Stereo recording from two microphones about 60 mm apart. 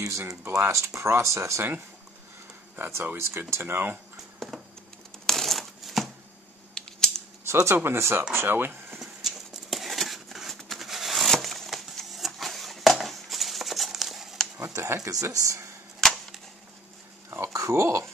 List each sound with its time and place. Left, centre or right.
0.7 s speech: right
2.7 s speech: right
3.2 s speech: right
5.2 s crushing: centre
6.7 s scissors: centre
7.6 s speech: right
9.0 s a sound: centre
14.6 s speech: right
16.0 s arrow: centre
17.4 s speech: right